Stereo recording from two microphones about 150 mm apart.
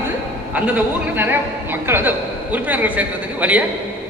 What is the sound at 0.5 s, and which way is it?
A man's voice, 10° right (ahead or behind).